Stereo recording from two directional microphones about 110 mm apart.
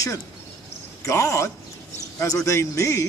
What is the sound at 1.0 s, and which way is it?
Speech, 30° left (ahead or behind).